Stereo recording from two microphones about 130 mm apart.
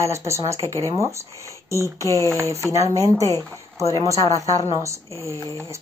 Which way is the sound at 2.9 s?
25° right (ahead or behind).